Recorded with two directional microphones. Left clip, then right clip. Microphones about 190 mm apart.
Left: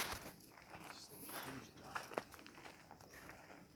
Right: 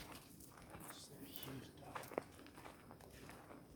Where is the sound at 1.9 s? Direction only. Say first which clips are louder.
Left 4 dB; 60° left (ahead or behind).